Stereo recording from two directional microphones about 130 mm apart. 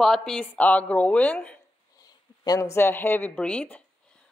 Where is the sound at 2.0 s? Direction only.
30° left (ahead or behind).